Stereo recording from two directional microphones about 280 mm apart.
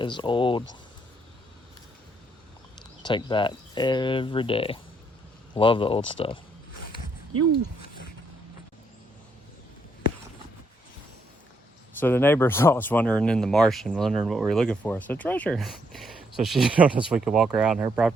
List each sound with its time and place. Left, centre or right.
0.0 s speech: centre
3.0 s speech: centre
11.9 s speech: centre